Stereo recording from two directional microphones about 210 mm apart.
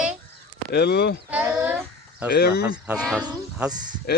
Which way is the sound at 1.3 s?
5° right (ahead or behind).